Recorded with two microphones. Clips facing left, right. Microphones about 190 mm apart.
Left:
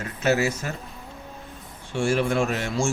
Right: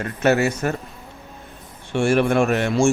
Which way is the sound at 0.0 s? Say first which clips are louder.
Right 4 dB; 60° right (ahead or behind).